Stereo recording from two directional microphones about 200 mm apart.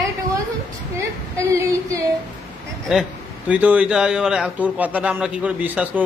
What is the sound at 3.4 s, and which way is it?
A man's voice, 5° right (ahead or behind).